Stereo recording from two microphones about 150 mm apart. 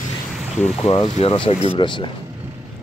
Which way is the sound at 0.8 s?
30° left (ahead or behind).